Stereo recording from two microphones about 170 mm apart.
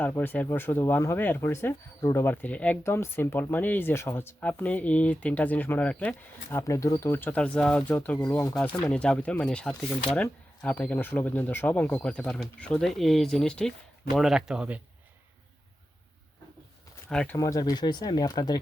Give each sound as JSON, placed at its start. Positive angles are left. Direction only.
{"t": 0.0, "sound": "speech", "side_deg": 10}
{"t": 17.1, "sound": "speech", "side_deg": 5}
{"t": 17.3, "sound": "speech", "side_deg": 20}